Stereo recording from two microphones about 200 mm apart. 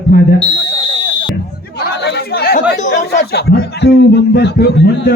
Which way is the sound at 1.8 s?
55° left (ahead or behind).